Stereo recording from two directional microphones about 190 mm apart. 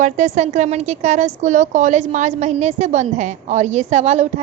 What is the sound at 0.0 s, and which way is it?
A woman's voice, 40° right (ahead or behind).